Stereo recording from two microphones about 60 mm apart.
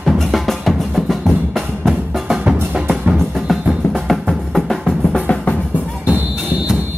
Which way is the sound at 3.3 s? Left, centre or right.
Centre.